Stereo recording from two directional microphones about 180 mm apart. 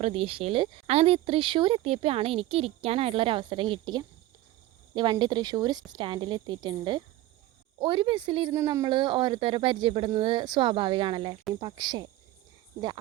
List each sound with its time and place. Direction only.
0.0 s speech: 35° right (ahead or behind)
8.5 s speech: 20° right (ahead or behind)